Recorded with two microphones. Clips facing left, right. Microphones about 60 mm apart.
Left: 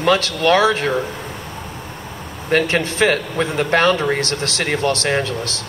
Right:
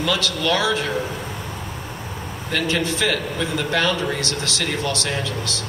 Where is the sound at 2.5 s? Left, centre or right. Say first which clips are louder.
Left 5 dB; left.